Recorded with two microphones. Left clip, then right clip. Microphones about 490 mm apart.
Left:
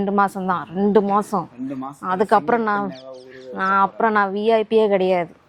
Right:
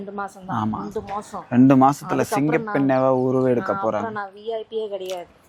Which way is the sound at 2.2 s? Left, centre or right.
Left.